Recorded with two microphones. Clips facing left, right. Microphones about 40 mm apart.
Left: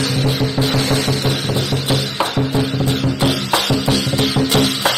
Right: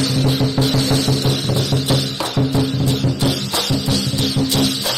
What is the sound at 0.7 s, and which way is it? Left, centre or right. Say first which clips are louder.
Music: even; left.